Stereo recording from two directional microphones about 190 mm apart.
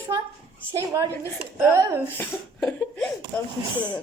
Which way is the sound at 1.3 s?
10° right (ahead or behind).